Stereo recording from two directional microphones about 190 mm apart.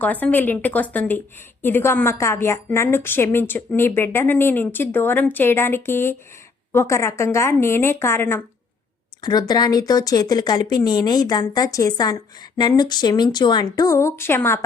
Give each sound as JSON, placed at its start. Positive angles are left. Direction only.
{"t": 0.0, "sound": "a woman's voice", "side_deg": 10}